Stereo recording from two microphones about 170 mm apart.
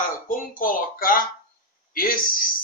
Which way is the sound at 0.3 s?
55° left (ahead or behind).